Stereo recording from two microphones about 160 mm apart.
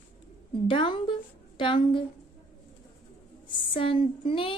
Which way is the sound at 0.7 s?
30° left (ahead or behind).